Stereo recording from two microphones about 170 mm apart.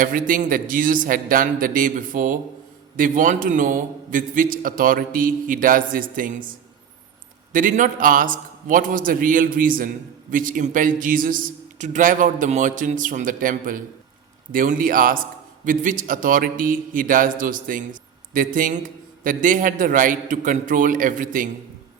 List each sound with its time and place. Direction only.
0.0 s a man's voice: 55° right (ahead or behind)
7.5 s a man's voice: 50° right (ahead or behind)